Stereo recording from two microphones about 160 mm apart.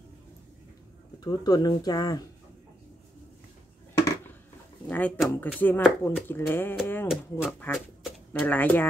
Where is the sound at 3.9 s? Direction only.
15° left (ahead or behind).